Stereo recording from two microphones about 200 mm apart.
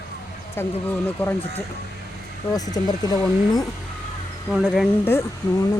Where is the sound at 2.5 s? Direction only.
20° left (ahead or behind).